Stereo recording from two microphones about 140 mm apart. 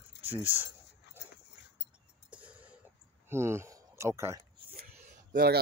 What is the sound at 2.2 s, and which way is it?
Cough, 10° right (ahead or behind).